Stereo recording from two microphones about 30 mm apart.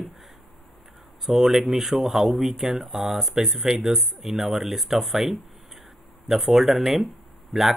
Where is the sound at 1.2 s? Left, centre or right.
Centre.